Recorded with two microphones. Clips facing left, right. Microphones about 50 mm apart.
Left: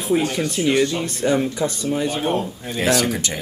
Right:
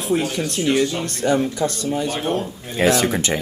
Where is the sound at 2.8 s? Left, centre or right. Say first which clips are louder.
Right 2 dB; right.